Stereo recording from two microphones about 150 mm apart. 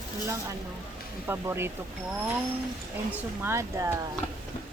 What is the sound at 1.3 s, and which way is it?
Speech, 15° right (ahead or behind).